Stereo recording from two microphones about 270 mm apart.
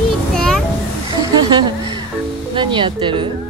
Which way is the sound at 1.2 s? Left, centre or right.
Centre.